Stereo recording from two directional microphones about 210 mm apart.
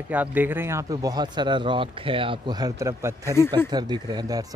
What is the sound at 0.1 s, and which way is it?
Speech, 10° right (ahead or behind).